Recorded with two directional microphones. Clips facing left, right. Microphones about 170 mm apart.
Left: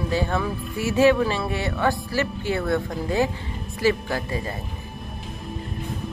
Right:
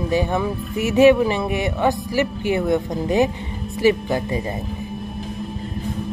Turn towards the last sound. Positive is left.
turn(degrees=-20)  # may be behind; listen again after turning